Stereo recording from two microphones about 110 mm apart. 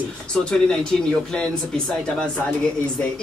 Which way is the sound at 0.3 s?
5° left (ahead or behind).